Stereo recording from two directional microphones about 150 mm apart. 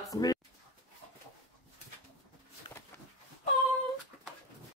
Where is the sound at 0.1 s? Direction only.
25° left (ahead or behind).